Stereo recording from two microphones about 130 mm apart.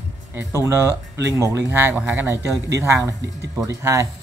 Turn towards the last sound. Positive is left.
turn(degrees=-25)  # may be behind; listen again after turning